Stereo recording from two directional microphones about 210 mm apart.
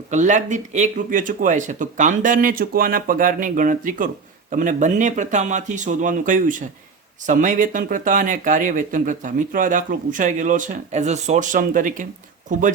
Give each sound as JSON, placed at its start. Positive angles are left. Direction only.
{"t": 0.1, "sound": "speech", "side_deg": -35}